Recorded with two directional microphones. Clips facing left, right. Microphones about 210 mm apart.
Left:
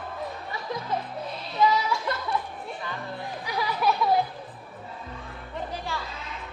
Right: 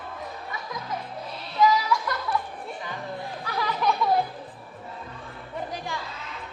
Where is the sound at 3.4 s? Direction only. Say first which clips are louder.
Left 1 dB; 10° left (ahead or behind).